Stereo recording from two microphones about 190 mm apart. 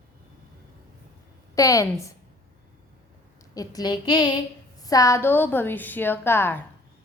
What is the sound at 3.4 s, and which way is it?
A woman's voice, 20° left (ahead or behind).